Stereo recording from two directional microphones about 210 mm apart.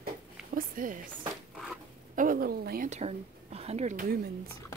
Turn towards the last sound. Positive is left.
turn(degrees=-45)  # may be behind; listen again after turning